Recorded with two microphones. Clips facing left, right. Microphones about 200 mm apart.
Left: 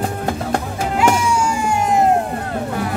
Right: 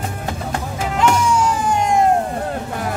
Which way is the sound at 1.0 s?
10° left (ahead or behind).